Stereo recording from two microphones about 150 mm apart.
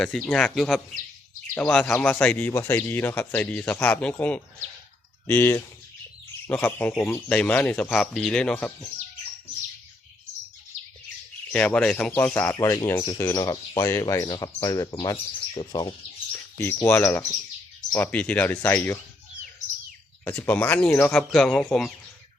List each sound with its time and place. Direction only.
0.0 s speech: 5° left (ahead or behind)
11.5 s speech: 10° left (ahead or behind); by 16.0 s 30° left (ahead or behind)
16.6 s speech: 15° left (ahead or behind)
20.2 s speech: 10° left (ahead or behind)